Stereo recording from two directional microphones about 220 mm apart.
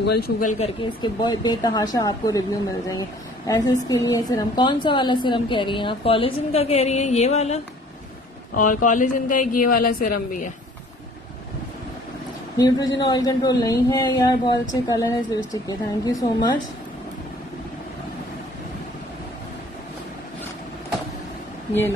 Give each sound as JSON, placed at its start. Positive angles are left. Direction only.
{"t": 0.5, "sound": "a woman's voice", "side_deg": 25}
{"t": 12.5, "sound": "speech", "side_deg": 15}